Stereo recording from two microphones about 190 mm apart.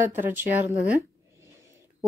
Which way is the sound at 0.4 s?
10° right (ahead or behind).